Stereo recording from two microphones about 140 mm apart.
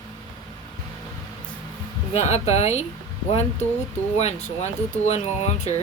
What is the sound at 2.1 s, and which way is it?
Speech, 50° left (ahead or behind).